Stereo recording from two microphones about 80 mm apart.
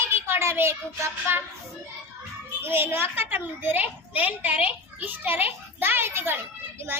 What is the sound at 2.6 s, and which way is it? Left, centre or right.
A child's voice, right.